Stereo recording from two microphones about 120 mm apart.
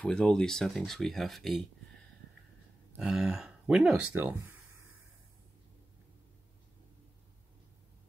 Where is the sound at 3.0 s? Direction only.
5° right (ahead or behind).